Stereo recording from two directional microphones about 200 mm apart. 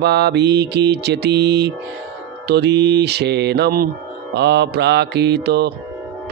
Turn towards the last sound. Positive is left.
turn(degrees=-55)  # may be behind; listen again after turning